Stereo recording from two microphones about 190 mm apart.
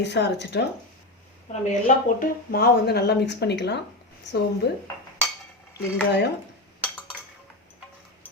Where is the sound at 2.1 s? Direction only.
50° left (ahead or behind).